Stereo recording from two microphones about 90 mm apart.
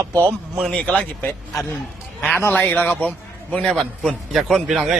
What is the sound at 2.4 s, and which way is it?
A man's voice, 25° left (ahead or behind).